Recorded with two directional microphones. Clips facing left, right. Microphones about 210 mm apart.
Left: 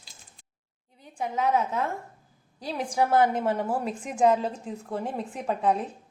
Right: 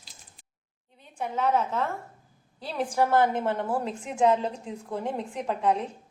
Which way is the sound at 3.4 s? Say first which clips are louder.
Left 1 dB; 10° left (ahead or behind).